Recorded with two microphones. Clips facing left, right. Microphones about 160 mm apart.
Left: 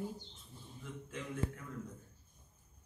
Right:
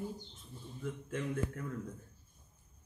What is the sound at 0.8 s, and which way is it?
Speech, 55° right (ahead or behind).